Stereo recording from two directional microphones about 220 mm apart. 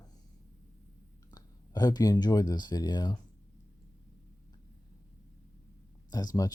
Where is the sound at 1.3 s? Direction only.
15° left (ahead or behind).